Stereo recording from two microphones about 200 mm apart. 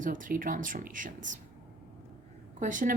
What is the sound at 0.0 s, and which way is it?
A woman's voice, 40° right (ahead or behind).